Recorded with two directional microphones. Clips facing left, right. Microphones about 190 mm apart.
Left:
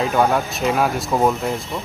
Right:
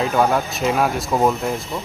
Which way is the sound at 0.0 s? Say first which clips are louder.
Even; centre (ahead or behind).